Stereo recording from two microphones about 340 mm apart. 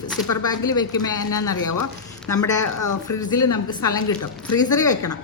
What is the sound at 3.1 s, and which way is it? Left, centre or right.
A woman's voice, centre.